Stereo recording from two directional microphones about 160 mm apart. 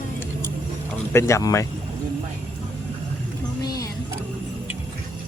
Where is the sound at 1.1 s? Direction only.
20° left (ahead or behind).